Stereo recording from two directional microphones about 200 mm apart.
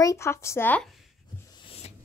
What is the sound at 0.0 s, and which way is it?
Speech, 15° left (ahead or behind).